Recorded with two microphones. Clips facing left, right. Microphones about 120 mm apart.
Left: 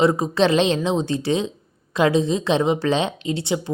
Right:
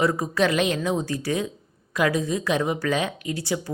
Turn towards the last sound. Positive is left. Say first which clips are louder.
# left 4 dB
turn(degrees=25)  # may be behind; listen again after turning